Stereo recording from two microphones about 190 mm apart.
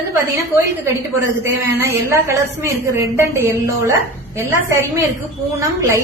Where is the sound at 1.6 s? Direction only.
15° right (ahead or behind).